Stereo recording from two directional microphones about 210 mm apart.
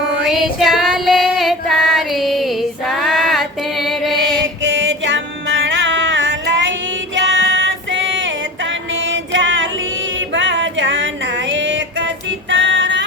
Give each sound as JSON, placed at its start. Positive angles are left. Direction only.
{"t": 0.3, "sound": "child singing", "side_deg": 0}
{"t": 4.6, "sound": "music", "side_deg": -60}
{"t": 7.2, "sound": "female singing", "side_deg": -60}
{"t": 10.2, "sound": "music", "side_deg": -60}